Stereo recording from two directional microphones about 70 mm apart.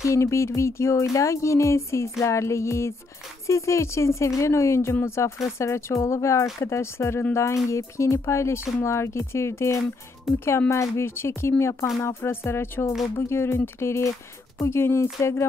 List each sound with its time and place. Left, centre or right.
0.0 s music: left
5.0 s speech: left
6.0 s music: left
6.6 s speech: left
7.7 s music: left
8.8 s speech: left
10.3 s speech: centre
10.7 s speech: left